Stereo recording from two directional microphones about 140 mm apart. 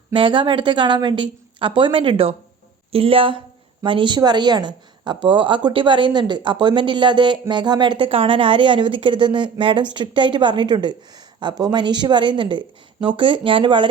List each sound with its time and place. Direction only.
0.1 s a woman's voice: 35° right (ahead or behind)